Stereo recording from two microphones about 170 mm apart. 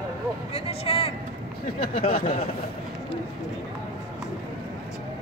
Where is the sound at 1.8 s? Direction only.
35° left (ahead or behind).